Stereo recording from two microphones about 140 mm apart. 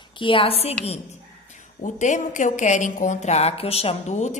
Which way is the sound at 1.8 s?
65° left (ahead or behind).